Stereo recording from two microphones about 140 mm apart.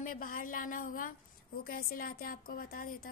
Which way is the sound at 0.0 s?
75° left (ahead or behind).